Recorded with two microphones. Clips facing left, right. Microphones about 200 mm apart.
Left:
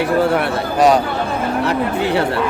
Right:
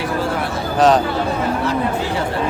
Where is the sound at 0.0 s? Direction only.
65° left (ahead or behind).